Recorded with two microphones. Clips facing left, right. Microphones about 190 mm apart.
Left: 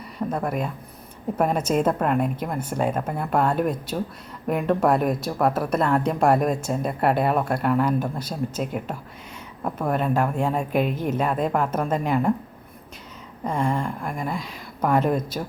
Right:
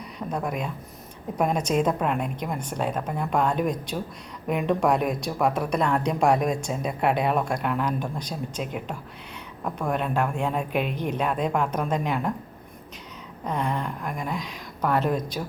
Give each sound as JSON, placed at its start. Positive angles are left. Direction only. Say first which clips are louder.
{"t": 0.2, "sound": "speech", "louder": "left 3 dB", "side_deg": 5}
{"t": 9.6, "sound": "speech", "louder": "left 3 dB", "side_deg": 5}
{"t": 10.7, "sound": "a woman's voice", "louder": "left 4 dB", "side_deg": 40}
{"t": 11.1, "sound": "speech", "louder": "even", "side_deg": 5}
{"t": 13.4, "sound": "speech", "louder": "left 3 dB", "side_deg": 10}